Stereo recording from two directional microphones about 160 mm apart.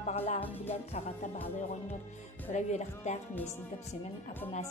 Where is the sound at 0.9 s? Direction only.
45° left (ahead or behind).